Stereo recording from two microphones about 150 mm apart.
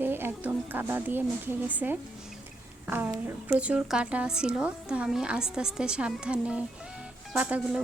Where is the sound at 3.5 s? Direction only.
10° right (ahead or behind).